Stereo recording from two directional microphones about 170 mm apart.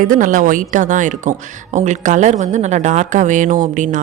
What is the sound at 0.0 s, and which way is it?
A woman's voice, 50° right (ahead or behind).